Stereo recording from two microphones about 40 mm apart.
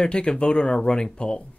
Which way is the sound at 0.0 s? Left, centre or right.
Left.